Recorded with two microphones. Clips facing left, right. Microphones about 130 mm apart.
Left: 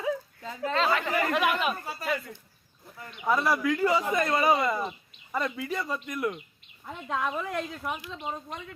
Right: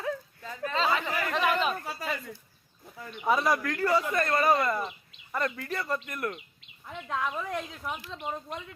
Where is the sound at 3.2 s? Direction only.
Centre (ahead or behind).